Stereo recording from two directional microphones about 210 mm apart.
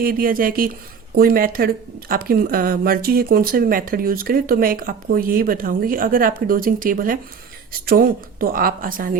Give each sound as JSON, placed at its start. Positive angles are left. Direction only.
{"t": 0.0, "sound": "a woman's voice", "side_deg": -45}